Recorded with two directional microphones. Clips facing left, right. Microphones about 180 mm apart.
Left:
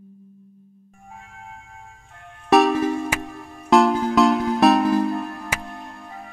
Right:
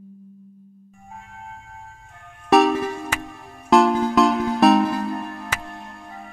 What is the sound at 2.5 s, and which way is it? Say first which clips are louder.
Music: even; centre (ahead or behind).